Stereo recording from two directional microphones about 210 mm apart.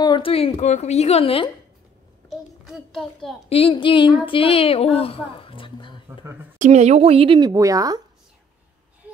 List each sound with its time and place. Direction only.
0.0 s a woman's voice: 20° left (ahead or behind)
2.2 s a child's voice: centre (ahead or behind)
3.4 s a woman's voice: 25° left (ahead or behind)
6.6 s speech: 35° right (ahead or behind); by 8.0 s 15° right (ahead or behind)